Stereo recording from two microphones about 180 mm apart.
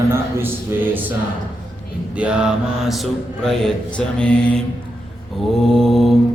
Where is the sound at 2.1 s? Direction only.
5° right (ahead or behind).